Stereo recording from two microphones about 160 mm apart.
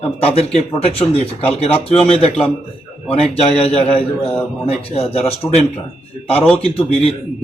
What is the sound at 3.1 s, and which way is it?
A man's voice, 40° left (ahead or behind).